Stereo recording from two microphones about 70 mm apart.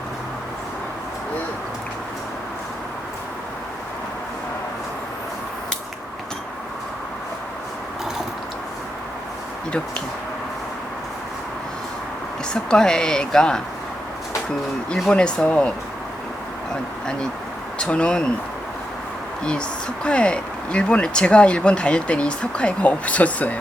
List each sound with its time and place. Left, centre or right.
12.5 s speech: centre
15.1 s speech: centre
17.7 s speech: centre
20.1 s speech: centre